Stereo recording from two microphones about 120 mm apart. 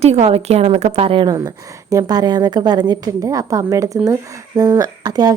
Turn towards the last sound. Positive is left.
turn(degrees=-35)  # may be behind; listen again after turning